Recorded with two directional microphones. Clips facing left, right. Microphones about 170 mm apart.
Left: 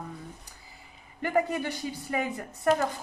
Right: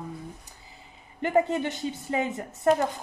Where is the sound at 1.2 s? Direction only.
20° right (ahead or behind).